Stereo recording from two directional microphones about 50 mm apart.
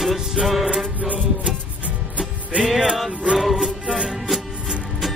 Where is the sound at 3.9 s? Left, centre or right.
Centre.